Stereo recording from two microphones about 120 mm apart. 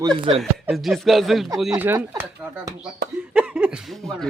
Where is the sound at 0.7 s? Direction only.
Centre (ahead or behind).